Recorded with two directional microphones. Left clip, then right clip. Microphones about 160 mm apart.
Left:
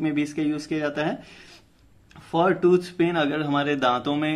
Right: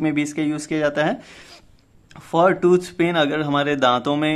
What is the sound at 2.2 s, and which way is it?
Speech, 45° right (ahead or behind).